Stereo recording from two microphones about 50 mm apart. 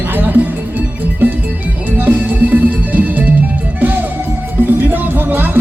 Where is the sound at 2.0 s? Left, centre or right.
Right.